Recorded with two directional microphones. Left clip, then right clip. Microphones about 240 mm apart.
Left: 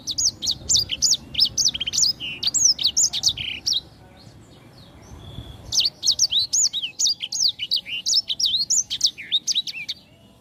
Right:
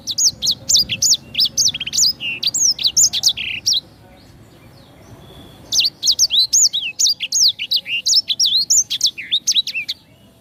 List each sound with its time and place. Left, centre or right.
0.0 s bird: centre
5.7 s chirp: centre
8.9 s bird: centre